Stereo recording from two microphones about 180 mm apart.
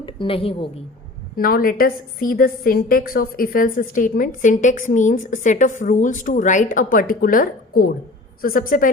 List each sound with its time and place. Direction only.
0.0 s a woman's voice: 30° left (ahead or behind)
1.4 s a woman's voice: 55° left (ahead or behind)